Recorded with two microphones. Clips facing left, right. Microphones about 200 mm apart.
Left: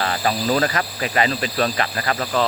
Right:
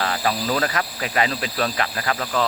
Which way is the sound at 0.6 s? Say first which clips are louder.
Left 2 dB; centre (ahead or behind).